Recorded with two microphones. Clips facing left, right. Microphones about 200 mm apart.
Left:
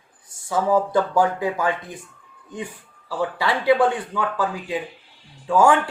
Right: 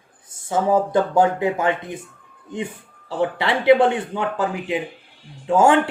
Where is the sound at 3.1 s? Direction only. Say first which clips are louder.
Right 2 dB; 25° right (ahead or behind).